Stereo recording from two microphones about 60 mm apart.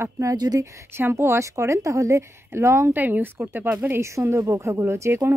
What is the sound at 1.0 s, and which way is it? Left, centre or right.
A woman's voice, right.